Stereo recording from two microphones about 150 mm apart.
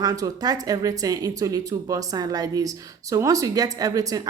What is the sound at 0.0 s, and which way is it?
A woman's voice, 25° right (ahead or behind).